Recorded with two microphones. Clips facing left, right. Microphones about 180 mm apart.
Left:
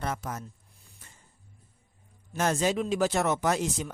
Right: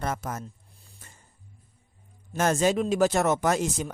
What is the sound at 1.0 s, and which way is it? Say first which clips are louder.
Music: right 3 dB; 45° right (ahead or behind).